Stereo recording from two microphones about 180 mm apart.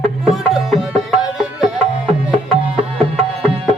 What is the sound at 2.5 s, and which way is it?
Music, 35° right (ahead or behind).